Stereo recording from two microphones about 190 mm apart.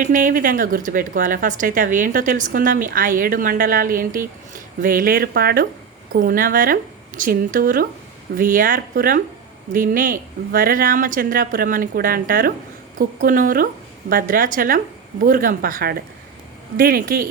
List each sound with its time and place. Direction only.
0.0 s speech: 45° right (ahead or behind)